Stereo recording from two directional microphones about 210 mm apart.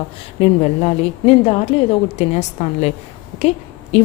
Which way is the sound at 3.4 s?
30° left (ahead or behind).